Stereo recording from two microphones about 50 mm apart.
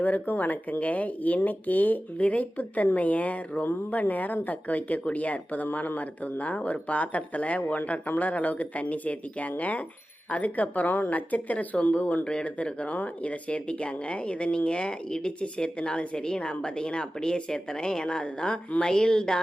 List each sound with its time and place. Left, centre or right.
0.0 s speech: left
12.2 s speech: centre